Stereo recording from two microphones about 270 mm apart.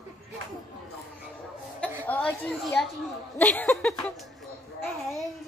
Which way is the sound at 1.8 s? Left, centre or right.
Centre.